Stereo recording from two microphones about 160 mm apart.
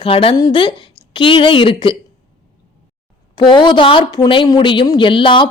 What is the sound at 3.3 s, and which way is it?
Speech, 30° left (ahead or behind).